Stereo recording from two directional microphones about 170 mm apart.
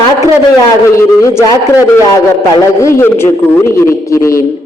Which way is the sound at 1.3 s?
15° left (ahead or behind).